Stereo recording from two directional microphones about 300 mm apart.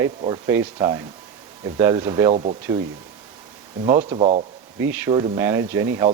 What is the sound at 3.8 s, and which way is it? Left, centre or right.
Speech, centre.